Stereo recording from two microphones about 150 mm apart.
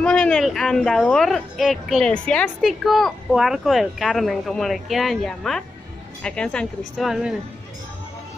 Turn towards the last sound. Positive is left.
turn(degrees=-5)  # may be behind; listen again after turning